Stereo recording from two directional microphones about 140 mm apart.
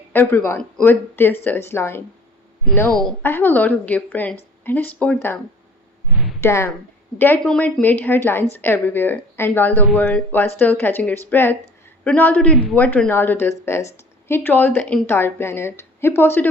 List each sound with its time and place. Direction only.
0.1 s a woman's voice: 15° left (ahead or behind)
6.4 s a woman's voice: 20° left (ahead or behind)